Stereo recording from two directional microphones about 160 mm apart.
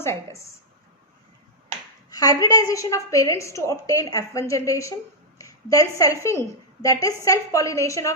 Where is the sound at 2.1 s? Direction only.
25° left (ahead or behind).